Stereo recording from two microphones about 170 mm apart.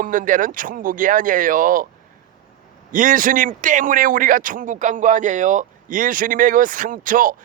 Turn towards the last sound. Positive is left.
turn(degrees=-55)  # may be behind; listen again after turning